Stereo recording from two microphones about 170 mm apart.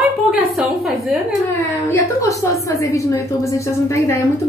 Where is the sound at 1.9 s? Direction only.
20° left (ahead or behind).